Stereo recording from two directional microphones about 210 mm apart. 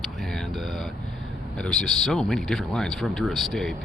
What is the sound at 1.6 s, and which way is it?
Speech, centre (ahead or behind).